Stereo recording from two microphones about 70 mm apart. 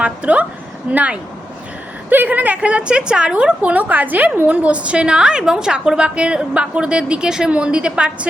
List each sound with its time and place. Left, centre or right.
0.0 s a woman's voice: centre